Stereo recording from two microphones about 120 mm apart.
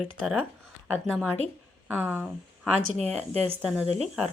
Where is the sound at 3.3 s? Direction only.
60° right (ahead or behind).